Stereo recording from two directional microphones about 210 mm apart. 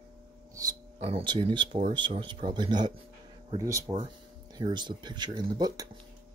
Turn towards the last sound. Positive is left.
turn(degrees=-20)  # may be behind; listen again after turning